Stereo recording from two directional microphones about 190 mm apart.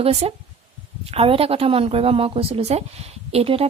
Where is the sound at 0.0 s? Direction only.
30° right (ahead or behind).